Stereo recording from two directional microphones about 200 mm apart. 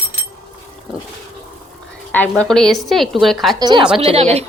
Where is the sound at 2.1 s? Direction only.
10° left (ahead or behind).